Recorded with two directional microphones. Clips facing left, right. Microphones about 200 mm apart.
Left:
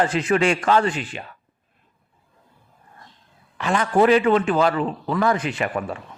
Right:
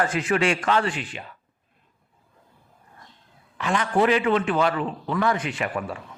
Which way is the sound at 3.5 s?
40° left (ahead or behind).